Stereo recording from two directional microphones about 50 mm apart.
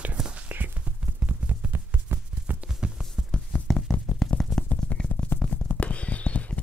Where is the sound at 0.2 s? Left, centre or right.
Centre.